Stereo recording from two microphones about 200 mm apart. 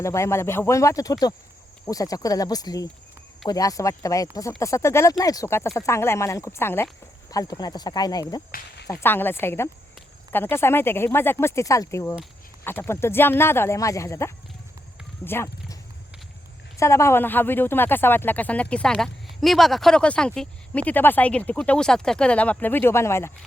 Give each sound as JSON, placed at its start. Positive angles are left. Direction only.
{"t": 0.0, "sound": "speech", "side_deg": 15}
{"t": 15.2, "sound": "horse", "side_deg": 10}
{"t": 16.7, "sound": "speech", "side_deg": 15}